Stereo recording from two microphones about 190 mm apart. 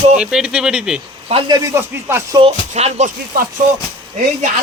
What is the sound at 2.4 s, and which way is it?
Speech, 35° right (ahead or behind).